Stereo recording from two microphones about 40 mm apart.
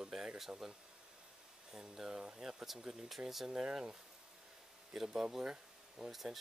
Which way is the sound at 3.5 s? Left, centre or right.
Right.